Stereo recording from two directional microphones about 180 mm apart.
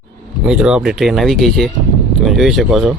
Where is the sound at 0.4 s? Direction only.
5° right (ahead or behind).